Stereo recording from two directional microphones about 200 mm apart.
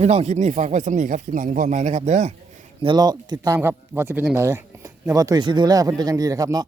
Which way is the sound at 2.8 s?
20° right (ahead or behind).